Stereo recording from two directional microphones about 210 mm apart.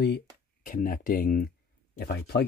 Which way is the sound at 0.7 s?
40° left (ahead or behind).